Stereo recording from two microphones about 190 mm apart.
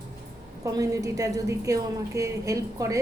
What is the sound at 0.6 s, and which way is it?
A woman's voice, 20° right (ahead or behind).